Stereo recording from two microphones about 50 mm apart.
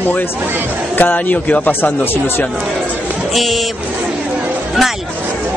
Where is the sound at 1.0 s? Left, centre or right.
Left.